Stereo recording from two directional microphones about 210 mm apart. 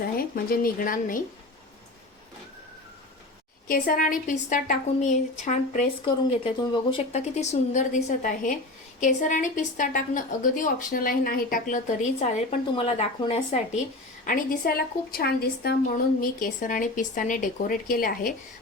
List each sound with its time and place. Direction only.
0.2 s speech: 45° left (ahead or behind)
3.7 s a woman's voice: 40° left (ahead or behind)
6.3 s a woman's voice: 25° left (ahead or behind)
14.3 s a woman's voice: 45° left (ahead or behind)